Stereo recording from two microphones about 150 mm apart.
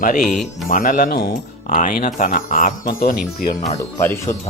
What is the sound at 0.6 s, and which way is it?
Speech, 65° left (ahead or behind).